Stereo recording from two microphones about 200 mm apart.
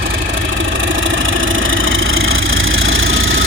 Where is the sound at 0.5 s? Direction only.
70° right (ahead or behind).